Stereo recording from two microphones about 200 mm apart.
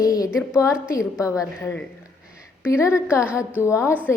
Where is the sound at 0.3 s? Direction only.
15° left (ahead or behind).